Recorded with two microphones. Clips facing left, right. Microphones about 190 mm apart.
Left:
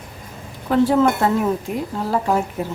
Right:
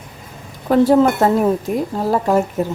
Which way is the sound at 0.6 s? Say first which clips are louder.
Right 4 dB; 40° right (ahead or behind).